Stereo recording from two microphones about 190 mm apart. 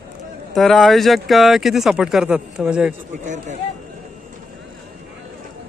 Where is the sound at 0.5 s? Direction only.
Centre (ahead or behind).